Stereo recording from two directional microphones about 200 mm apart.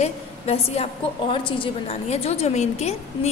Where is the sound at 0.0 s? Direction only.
30° left (ahead or behind).